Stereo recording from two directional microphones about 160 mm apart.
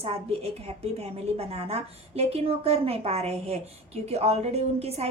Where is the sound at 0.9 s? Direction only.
40° right (ahead or behind).